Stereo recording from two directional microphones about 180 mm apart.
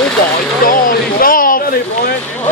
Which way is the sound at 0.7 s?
50° left (ahead or behind).